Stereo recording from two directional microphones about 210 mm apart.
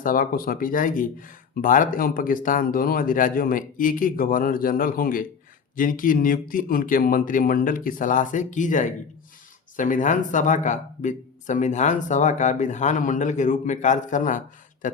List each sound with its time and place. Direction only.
0.0 s speech: 40° left (ahead or behind)